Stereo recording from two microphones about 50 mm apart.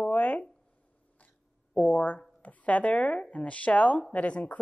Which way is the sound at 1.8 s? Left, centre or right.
Left.